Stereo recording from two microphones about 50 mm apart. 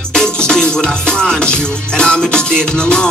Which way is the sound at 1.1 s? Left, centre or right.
Centre.